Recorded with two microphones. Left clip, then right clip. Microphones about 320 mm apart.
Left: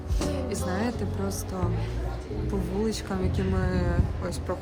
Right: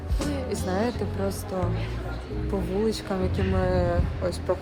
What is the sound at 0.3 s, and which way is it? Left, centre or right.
Music, centre.